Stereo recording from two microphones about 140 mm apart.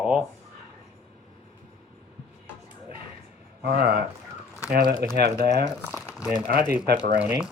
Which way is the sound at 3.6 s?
90° right.